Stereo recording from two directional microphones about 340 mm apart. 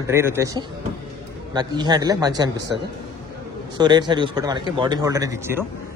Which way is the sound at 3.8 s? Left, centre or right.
Centre.